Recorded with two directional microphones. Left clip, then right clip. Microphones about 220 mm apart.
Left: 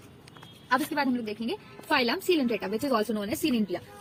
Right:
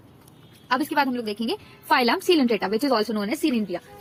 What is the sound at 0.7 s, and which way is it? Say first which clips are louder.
A woman's voice: right 4 dB; 45° right (ahead or behind).